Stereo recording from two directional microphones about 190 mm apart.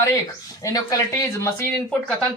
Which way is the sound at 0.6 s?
15° left (ahead or behind).